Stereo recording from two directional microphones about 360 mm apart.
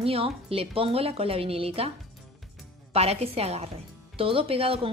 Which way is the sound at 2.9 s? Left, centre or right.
Centre.